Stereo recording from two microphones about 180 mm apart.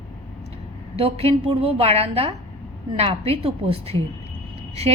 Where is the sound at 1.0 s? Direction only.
35° right (ahead or behind).